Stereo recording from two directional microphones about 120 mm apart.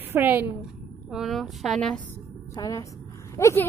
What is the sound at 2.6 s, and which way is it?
A woman's voice, 30° left (ahead or behind).